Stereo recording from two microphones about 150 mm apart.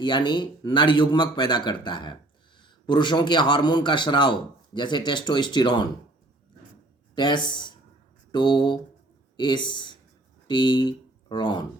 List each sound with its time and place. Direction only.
0.0 s a man's voice: 30° left (ahead or behind)
7.2 s speech: 30° left (ahead or behind)